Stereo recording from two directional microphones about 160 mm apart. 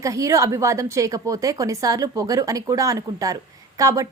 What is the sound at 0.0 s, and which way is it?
A woman's voice, 20° right (ahead or behind).